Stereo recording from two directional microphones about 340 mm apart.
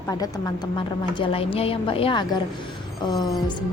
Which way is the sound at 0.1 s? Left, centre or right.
Centre.